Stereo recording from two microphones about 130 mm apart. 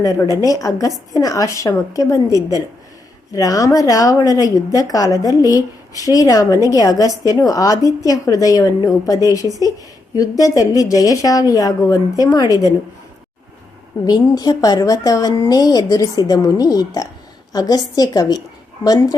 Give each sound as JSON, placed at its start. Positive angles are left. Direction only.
{"t": 0.4, "sound": "a woman's voice", "side_deg": 25}
{"t": 14.0, "sound": "a woman's voice", "side_deg": 30}